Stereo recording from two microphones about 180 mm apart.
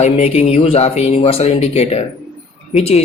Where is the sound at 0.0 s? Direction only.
35° left (ahead or behind).